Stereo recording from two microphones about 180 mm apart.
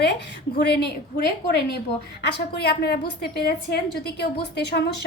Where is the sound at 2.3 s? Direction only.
65° left (ahead or behind).